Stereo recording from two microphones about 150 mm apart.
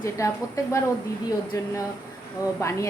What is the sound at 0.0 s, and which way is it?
A woman's voice, 20° left (ahead or behind).